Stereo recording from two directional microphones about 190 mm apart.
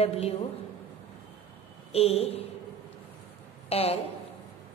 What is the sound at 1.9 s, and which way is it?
Speech, 30° left (ahead or behind).